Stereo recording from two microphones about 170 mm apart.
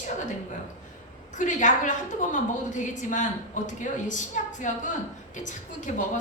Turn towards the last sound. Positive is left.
turn(degrees=45)  # may be behind; listen again after turning